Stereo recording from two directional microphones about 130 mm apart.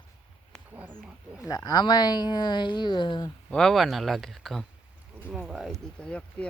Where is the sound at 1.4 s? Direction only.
30° left (ahead or behind).